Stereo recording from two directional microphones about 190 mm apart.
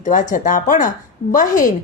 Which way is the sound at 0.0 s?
40° left (ahead or behind).